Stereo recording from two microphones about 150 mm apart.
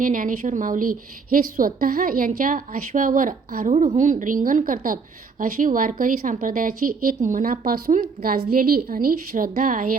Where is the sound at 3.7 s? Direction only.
50° right (ahead or behind).